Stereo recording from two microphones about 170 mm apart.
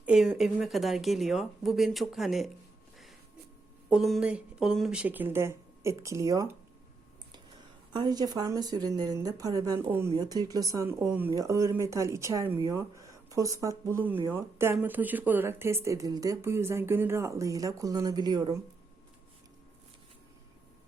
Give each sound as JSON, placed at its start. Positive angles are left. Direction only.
{"t": 0.0, "sound": "speech", "side_deg": -5}
{"t": 3.8, "sound": "speech", "side_deg": 0}
{"t": 7.9, "sound": "a woman's voice", "side_deg": -25}